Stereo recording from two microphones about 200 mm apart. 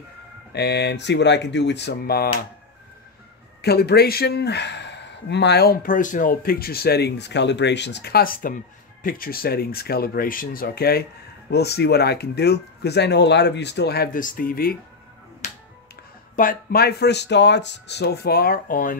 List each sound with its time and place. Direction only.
0.5 s speech: 55° left (ahead or behind)
3.6 s speech: 50° left (ahead or behind)
15.4 s finger snapping: 35° left (ahead or behind)
16.3 s speech: 45° left (ahead or behind)